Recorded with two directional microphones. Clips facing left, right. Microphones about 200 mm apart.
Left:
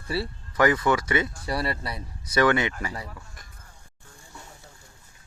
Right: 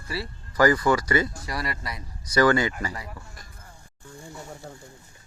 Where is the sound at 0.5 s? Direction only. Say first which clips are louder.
Right 1 dB; centre (ahead or behind).